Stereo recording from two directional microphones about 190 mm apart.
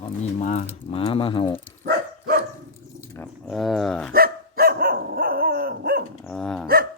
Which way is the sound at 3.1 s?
5° left (ahead or behind).